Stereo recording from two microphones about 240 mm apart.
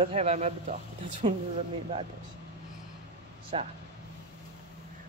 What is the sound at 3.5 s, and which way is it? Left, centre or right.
Speech, right.